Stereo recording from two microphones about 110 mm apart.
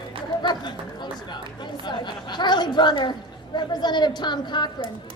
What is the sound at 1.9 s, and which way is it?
Speech, 40° left (ahead or behind).